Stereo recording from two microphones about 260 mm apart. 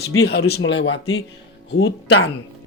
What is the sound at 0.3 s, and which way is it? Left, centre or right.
Speech, left.